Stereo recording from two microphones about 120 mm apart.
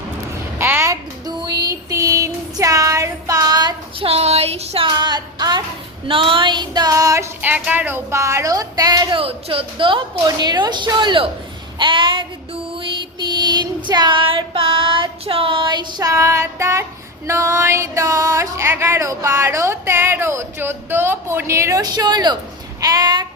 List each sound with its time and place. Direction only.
0.6 s a sound: 20° right (ahead or behind)
1.3 s a sound: 35° right (ahead or behind)
4.0 s music: 55° right (ahead or behind)
4.9 s music: 35° right (ahead or behind)
6.1 s female singing: 45° right (ahead or behind); by 7.3 s 30° right (ahead or behind)
7.4 s speech: 15° right (ahead or behind); by 11.3 s 40° right (ahead or behind)
11.8 s child singing: 40° right (ahead or behind)
12.7 s female singing: 40° right (ahead or behind); by 16.8 s 25° right (ahead or behind)
17.2 s a sound: 25° right (ahead or behind)